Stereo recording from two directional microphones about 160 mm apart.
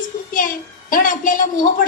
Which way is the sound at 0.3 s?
55° left (ahead or behind).